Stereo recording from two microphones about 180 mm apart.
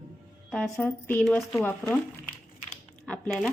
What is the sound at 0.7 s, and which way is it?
Speech, 15° left (ahead or behind).